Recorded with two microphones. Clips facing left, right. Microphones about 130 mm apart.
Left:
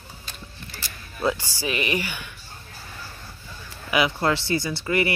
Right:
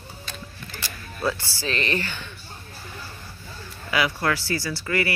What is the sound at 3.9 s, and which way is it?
Speech, 20° left (ahead or behind).